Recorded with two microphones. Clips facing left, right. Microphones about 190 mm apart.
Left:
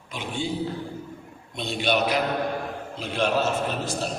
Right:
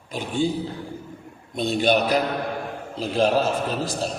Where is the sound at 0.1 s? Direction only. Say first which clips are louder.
Right 6 dB; 40° right (ahead or behind).